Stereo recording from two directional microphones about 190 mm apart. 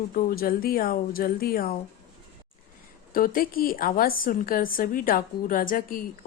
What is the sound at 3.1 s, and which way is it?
A woman's voice, 50° left (ahead or behind).